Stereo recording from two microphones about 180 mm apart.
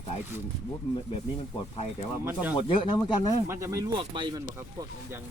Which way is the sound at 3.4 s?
15° right (ahead or behind).